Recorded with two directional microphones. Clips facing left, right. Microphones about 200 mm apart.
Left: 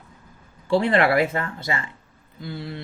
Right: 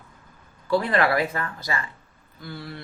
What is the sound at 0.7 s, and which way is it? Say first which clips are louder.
Speech: left 3 dB; 25° left (ahead or behind).